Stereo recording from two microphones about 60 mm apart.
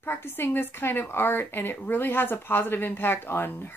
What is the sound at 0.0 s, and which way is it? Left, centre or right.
A woman's voice, left.